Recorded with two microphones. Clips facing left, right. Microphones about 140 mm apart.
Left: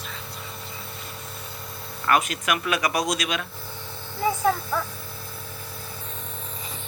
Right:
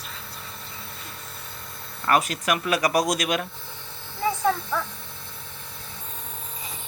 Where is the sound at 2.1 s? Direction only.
35° right (ahead or behind).